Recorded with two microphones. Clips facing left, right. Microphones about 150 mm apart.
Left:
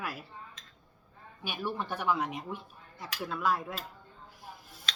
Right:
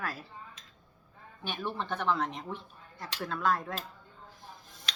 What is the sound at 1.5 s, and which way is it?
Speech, 10° left (ahead or behind).